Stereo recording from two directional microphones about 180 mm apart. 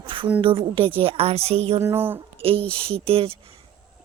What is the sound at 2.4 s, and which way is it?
A woman's voice, 30° right (ahead or behind).